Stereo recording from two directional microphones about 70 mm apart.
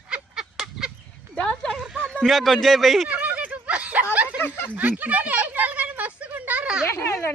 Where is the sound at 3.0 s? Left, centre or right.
Right.